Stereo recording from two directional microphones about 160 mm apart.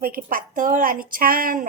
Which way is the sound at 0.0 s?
65° right (ahead or behind).